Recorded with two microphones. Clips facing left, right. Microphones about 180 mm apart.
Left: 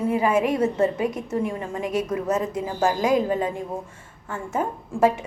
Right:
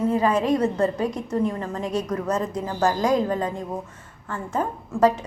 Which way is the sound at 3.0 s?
20° left (ahead or behind).